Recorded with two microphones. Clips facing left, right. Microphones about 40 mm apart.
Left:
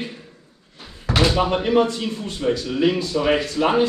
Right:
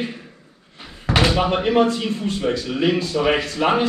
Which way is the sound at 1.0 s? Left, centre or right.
Right.